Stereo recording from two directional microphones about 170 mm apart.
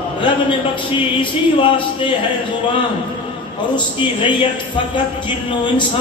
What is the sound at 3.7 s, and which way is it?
A man's voice, 30° left (ahead or behind).